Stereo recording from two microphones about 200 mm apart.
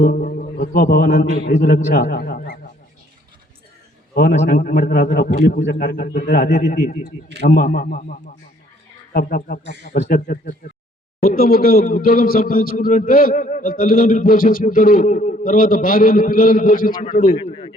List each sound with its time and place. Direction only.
0.0 s a man's voice: 45° left (ahead or behind)
2.0 s a sound: 50° left (ahead or behind)
4.1 s a man's voice: 50° left (ahead or behind)
9.1 s speech: 50° left (ahead or behind); by 17.7 s 30° left (ahead or behind)